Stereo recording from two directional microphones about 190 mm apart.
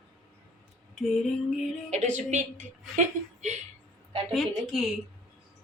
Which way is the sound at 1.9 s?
40° right (ahead or behind).